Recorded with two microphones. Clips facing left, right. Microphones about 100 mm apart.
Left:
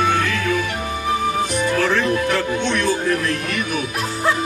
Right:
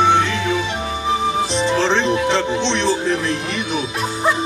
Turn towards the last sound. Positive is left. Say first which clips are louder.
# right 1 dB
turn(degrees=-25)  # may be behind; listen again after turning